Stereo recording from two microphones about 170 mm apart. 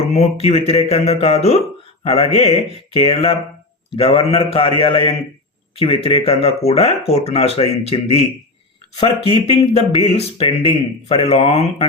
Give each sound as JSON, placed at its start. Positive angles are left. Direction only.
{"t": 0.0, "sound": "speech", "side_deg": 40}